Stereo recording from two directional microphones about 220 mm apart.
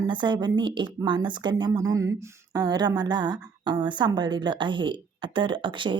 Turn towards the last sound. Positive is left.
turn(degrees=-20)  # may be behind; listen again after turning